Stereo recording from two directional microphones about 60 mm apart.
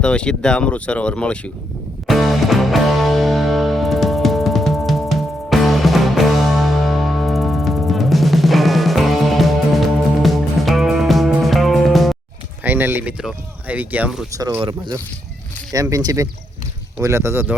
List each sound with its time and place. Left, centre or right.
0.0 s speech: centre
2.0 s music: centre
12.6 s speech: right
14.3 s speech: right
15.7 s speech: right
17.0 s speech: right